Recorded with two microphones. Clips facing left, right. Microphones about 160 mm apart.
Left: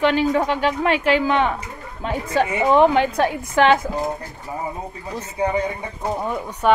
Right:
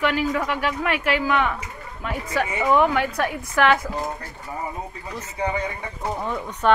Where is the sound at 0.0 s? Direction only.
25° left (ahead or behind).